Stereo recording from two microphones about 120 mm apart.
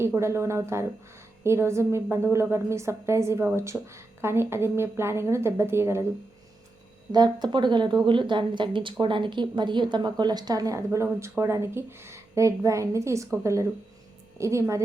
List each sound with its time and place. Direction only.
0.0 s speech: 20° right (ahead or behind)
7.1 s speech: 35° right (ahead or behind)